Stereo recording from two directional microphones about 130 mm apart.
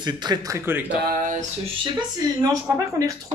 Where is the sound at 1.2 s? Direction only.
85° right.